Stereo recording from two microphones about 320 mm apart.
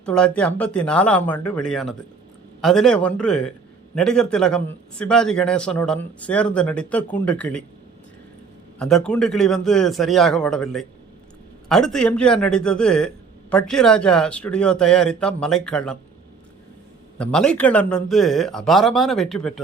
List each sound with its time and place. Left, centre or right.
0.0 s a man's voice: centre
8.8 s a man's voice: centre
17.2 s a man's voice: centre